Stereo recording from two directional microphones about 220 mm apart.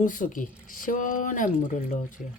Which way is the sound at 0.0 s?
35° left (ahead or behind).